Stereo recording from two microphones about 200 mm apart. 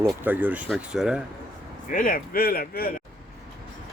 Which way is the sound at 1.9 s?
40° left (ahead or behind).